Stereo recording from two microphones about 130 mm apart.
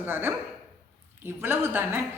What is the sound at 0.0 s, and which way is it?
A woman's voice, 15° right (ahead or behind).